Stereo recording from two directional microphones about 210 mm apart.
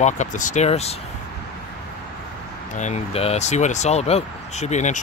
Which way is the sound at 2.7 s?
35° left (ahead or behind).